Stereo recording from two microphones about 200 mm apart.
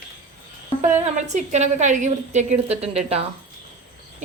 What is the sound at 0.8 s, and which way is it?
Speech, 35° right (ahead or behind).